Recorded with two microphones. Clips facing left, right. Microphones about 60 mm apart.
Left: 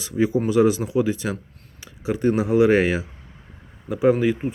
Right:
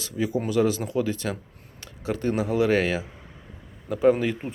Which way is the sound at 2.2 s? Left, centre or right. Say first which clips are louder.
Left 6 dB; centre.